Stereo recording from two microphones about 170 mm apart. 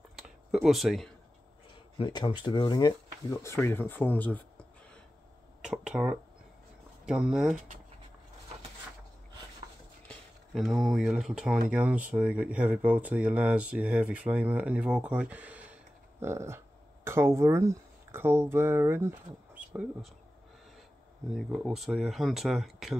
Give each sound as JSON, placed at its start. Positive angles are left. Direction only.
{"t": 0.1, "sound": "a sound", "side_deg": 0}
{"t": 2.0, "sound": "speech", "side_deg": 30}
{"t": 5.6, "sound": "speech", "side_deg": -5}
{"t": 7.5, "sound": "speech", "side_deg": -50}
{"t": 10.0, "sound": "speech", "side_deg": 0}
{"t": 21.4, "sound": "speech", "side_deg": 0}